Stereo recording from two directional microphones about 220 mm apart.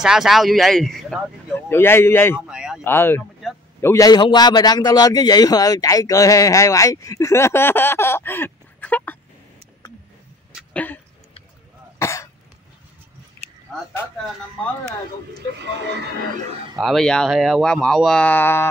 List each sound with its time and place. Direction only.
0.0 s speech: centre (ahead or behind)
2.4 s speech: 5° right (ahead or behind)
2.8 s a man's voice: 10° left (ahead or behind)
10.5 s a sound: 5° left (ahead or behind)
12.0 s cough: 15° left (ahead or behind)
16.7 s speech: centre (ahead or behind)